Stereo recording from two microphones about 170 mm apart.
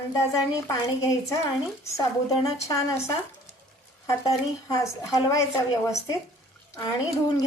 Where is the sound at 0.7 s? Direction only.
20° left (ahead or behind).